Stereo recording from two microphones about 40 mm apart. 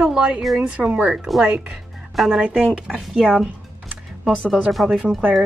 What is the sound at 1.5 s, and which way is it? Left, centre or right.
Speech, right.